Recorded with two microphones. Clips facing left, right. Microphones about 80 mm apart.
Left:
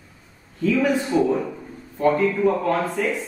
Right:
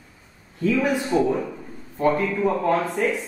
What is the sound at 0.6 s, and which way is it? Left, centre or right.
Speech, centre.